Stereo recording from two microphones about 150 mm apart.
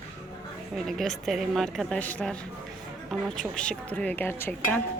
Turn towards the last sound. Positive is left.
turn(degrees=15)  # may be behind; listen again after turning